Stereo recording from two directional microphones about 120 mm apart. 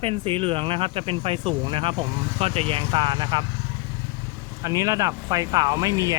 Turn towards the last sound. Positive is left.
turn(degrees=-30)  # may be behind; listen again after turning